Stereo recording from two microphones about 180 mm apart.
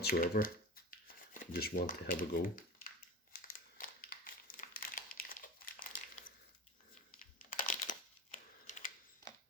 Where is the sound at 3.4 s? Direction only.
50° left (ahead or behind).